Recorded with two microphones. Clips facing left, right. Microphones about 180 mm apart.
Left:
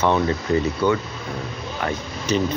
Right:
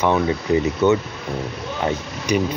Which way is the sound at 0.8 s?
25° right (ahead or behind).